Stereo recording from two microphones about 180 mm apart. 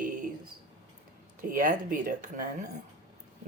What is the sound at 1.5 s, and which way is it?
Speech, 50° right (ahead or behind).